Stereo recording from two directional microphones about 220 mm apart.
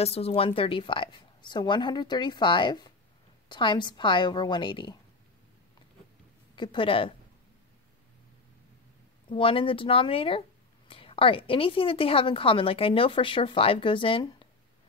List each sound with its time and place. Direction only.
0.0 s a woman's voice: 30° left (ahead or behind)
6.5 s a woman's voice: 20° left (ahead or behind)
9.3 s a woman's voice: 25° left (ahead or behind)